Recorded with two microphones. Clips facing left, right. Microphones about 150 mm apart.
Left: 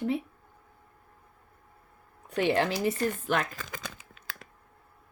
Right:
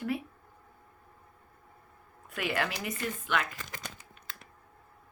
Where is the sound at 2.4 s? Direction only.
30° left (ahead or behind).